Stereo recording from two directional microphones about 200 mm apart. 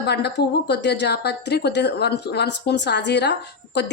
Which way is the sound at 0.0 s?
55° left (ahead or behind).